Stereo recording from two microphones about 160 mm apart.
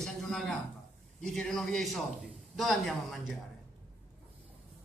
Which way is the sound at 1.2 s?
5° left (ahead or behind).